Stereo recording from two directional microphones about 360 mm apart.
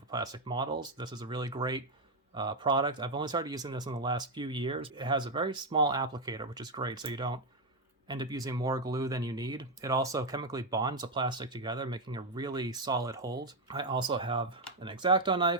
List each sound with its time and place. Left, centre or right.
0.1 s speech: centre